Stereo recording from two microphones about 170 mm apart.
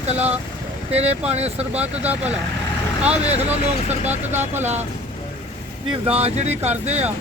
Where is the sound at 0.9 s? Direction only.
40° right (ahead or behind).